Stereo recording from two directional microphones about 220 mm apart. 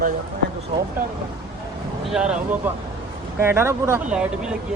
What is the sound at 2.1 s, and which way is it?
Speech, 5° right (ahead or behind).